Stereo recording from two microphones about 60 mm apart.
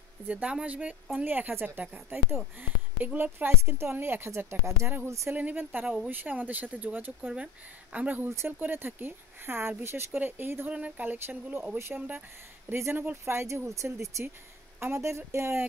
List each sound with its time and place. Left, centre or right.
0.3 s speech: centre
1.5 s speech: right
3.2 s speech: right
5.3 s speech: right
8.5 s speech: right
10.7 s speech: right
12.6 s speech: right
12.9 s speech: right
13.2 s speech: right